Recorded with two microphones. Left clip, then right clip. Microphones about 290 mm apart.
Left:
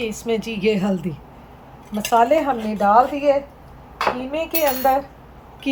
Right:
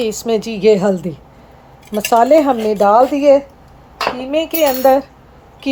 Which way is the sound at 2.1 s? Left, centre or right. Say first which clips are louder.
Right 6 dB; right.